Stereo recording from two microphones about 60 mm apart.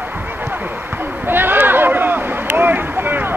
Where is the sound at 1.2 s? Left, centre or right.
Right.